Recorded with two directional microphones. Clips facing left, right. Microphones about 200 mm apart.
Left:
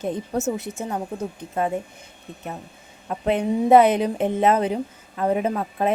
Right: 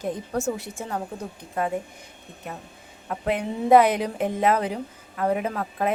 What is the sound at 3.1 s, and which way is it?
A woman's voice, 25° left (ahead or behind).